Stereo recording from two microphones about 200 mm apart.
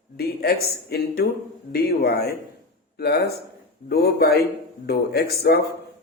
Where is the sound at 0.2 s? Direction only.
50° left (ahead or behind).